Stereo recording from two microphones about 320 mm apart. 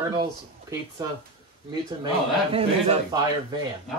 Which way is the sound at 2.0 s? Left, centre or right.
Centre.